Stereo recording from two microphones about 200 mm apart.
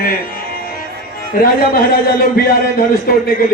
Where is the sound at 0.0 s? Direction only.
45° left (ahead or behind).